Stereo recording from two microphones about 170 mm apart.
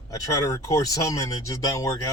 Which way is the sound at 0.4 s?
20° left (ahead or behind).